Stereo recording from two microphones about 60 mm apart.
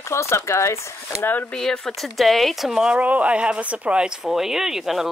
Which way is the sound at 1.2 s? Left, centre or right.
Left.